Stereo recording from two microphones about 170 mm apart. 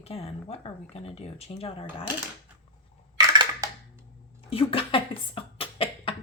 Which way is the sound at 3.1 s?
25° right (ahead or behind).